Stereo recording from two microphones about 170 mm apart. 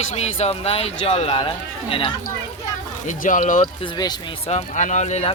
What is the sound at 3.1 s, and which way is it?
Speech, 50° left (ahead or behind).